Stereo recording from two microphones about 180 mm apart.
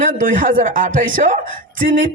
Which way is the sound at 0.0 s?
50° right (ahead or behind).